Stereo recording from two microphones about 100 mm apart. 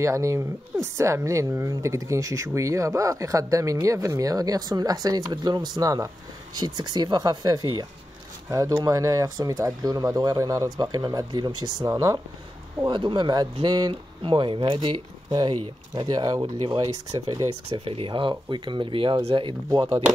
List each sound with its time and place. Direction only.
0.0 s speech: 30° right (ahead or behind)
11.9 s speech: 35° right (ahead or behind)
12.8 s speech: 50° right (ahead or behind)
15.2 s speech: 45° right (ahead or behind)
17.6 s speech: 65° right (ahead or behind)
19.7 s speech: 40° right (ahead or behind)